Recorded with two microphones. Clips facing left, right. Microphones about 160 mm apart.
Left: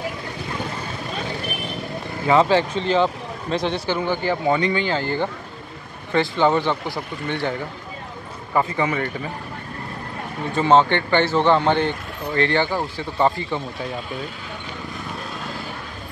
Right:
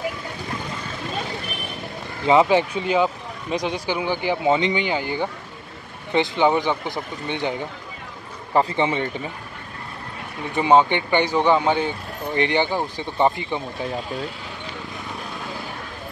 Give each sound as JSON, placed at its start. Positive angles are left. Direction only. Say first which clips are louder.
{"t": 2.2, "sound": "speech", "louder": "even", "side_deg": -15}
{"t": 10.5, "sound": "speech", "louder": "even", "side_deg": -15}